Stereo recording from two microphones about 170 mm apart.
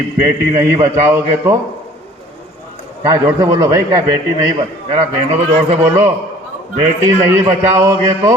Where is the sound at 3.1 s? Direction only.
20° right (ahead or behind).